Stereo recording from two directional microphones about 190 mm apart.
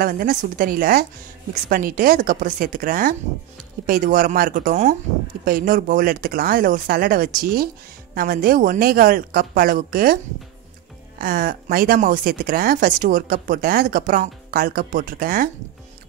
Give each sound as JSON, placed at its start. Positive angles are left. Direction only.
{"t": 0.0, "sound": "speech", "side_deg": -50}
{"t": 11.1, "sound": "speech", "side_deg": -50}